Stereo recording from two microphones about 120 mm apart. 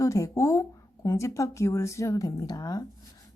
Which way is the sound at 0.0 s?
25° left (ahead or behind).